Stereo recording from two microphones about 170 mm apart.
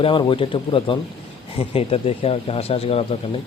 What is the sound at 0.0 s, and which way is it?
A man's voice, 30° left (ahead or behind).